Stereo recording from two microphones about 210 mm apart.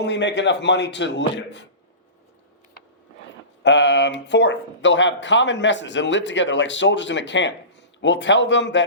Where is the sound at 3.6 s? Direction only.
55° left (ahead or behind).